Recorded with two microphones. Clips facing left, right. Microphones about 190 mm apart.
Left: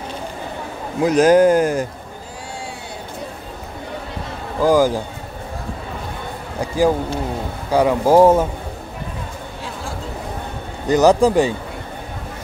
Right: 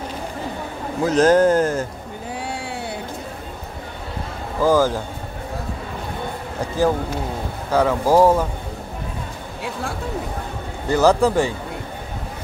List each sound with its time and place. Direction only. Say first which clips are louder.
1.0 s speech: left 2 dB; 15° left (ahead or behind)
2.4 s a sound: right 1 dB; 65° right (ahead or behind)
4.6 s speech: left 2 dB; 15° left (ahead or behind)
7.7 s speech: left 3 dB; 15° left (ahead or behind)
10.9 s speech: left 3 dB; 15° left (ahead or behind)